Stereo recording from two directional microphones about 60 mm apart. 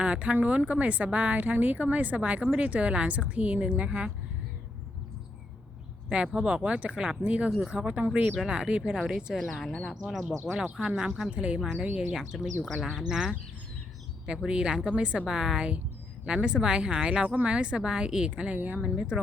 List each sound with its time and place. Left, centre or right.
0.0 s speech: right
6.1 s a woman's voice: centre
9.4 s a woman's voice: centre